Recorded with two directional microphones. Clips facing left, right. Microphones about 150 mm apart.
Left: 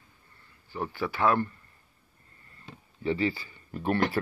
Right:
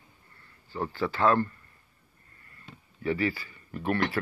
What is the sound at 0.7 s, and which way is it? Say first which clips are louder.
Speech: right 2 dB; 15° left (ahead or behind).